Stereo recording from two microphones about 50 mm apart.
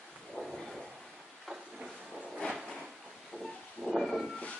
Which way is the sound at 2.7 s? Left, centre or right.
Centre.